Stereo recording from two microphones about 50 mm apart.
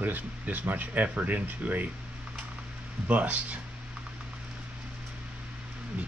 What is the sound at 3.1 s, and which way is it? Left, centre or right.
Speech, right.